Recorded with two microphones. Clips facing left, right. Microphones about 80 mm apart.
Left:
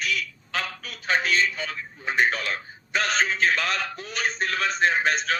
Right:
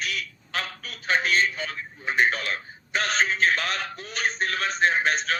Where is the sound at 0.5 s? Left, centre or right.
Centre.